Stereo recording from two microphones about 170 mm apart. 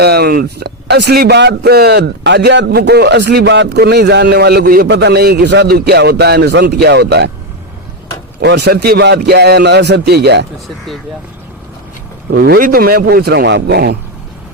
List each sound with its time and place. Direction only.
0.0 s a man's voice: 70° right (ahead or behind)
8.4 s a man's voice: 80° right
12.3 s a man's voice: 60° right (ahead or behind); by 13.9 s 75° right (ahead or behind)